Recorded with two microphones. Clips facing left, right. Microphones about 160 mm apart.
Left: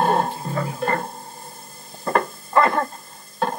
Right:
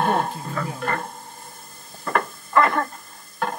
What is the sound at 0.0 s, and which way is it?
Music, 30° left (ahead or behind).